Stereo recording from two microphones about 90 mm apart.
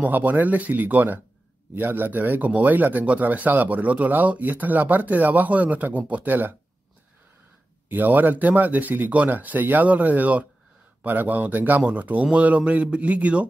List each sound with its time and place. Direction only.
0.0 s speech: 20° right (ahead or behind)
7.9 s speech: 20° right (ahead or behind)